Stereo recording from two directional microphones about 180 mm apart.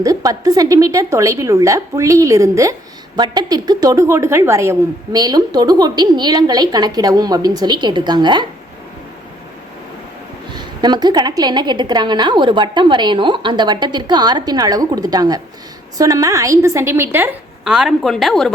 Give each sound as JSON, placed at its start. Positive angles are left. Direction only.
{"t": 0.0, "sound": "a woman's voice", "side_deg": -20}
{"t": 10.5, "sound": "a woman's voice", "side_deg": -25}